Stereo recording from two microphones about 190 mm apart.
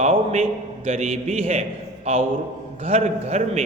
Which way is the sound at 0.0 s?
35° right (ahead or behind).